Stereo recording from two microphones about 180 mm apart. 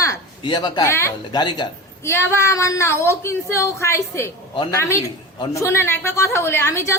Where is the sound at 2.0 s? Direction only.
15° left (ahead or behind).